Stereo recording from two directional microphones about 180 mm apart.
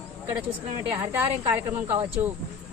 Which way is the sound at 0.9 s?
15° right (ahead or behind).